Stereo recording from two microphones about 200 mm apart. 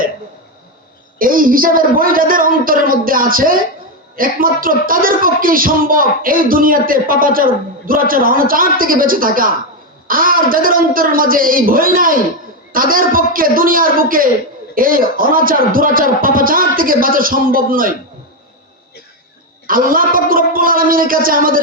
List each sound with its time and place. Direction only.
1.2 s speech: 45° right (ahead or behind)
19.6 s speech: 45° right (ahead or behind)